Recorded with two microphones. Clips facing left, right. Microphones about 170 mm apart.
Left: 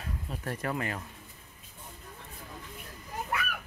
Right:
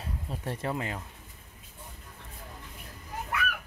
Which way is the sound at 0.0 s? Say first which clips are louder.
Right 1 dB; 25° right (ahead or behind).